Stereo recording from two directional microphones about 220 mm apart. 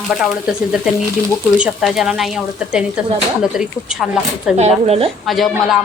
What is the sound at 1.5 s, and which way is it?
Speech, 5° right (ahead or behind).